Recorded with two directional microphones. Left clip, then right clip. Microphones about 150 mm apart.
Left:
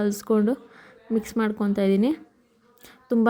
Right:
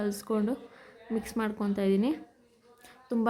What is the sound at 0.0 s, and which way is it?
A woman's voice, 30° left (ahead or behind).